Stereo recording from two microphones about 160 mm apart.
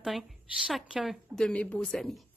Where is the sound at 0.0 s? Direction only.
Centre (ahead or behind).